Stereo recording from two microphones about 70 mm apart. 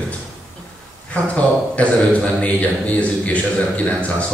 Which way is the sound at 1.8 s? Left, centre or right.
Centre.